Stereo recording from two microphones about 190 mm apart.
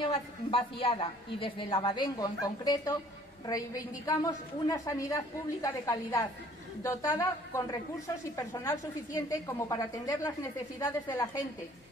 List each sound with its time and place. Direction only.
0.1 s a woman's voice: 30° left (ahead or behind)